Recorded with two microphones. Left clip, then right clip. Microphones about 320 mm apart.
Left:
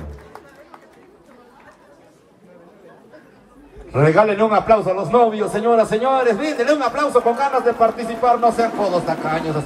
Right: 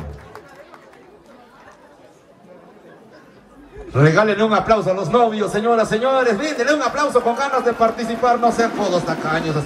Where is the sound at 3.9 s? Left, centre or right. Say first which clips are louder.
Left 1 dB; left.